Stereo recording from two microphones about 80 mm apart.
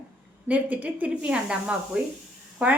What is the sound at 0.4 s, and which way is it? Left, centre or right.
A woman's voice, centre.